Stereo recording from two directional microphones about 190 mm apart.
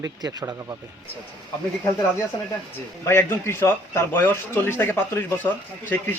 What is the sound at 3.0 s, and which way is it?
Speech, 15° left (ahead or behind).